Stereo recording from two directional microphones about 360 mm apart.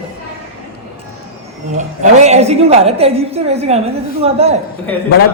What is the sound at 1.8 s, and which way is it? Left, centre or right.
A woman's voice, centre.